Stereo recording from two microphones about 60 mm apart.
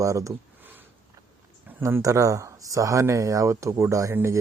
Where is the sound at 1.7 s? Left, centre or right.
Right.